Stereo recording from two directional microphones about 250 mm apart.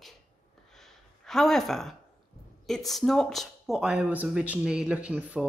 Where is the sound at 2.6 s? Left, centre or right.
Centre.